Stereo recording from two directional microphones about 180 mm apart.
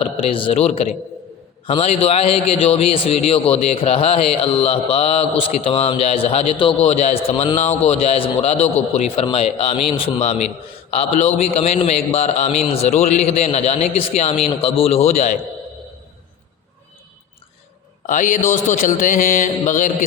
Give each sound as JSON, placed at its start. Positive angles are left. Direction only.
{"t": 0.0, "sound": "a man's voice", "side_deg": 30}
{"t": 18.0, "sound": "mantra", "side_deg": 45}